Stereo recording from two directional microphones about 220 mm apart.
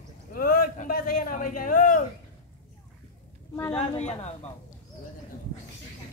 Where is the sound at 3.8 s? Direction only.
30° left (ahead or behind).